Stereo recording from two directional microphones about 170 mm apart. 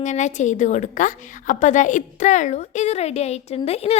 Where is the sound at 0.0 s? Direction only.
45° left (ahead or behind).